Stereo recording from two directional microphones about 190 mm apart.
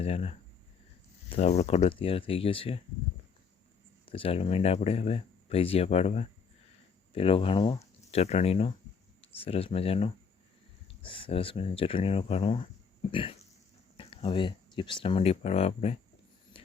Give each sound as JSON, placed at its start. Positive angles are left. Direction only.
{"t": 0.0, "sound": "speech", "side_deg": 35}
{"t": 1.3, "sound": "speech", "side_deg": 35}
{"t": 4.1, "sound": "speech", "side_deg": 30}